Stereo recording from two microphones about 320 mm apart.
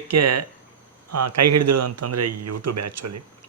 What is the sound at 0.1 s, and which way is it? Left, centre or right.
A man's voice, right.